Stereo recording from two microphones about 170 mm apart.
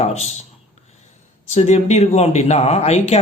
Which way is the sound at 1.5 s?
40° left (ahead or behind).